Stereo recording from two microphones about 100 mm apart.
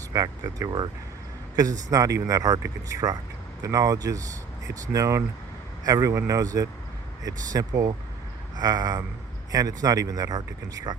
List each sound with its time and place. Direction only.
0.1 s speech: 35° right (ahead or behind)